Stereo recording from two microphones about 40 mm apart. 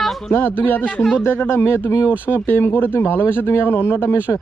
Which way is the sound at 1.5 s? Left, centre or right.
Left.